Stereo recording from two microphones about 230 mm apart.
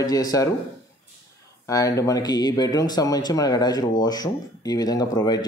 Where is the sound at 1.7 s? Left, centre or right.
Centre.